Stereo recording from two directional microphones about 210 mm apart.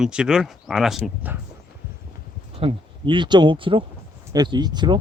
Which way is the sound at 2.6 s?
25° right (ahead or behind).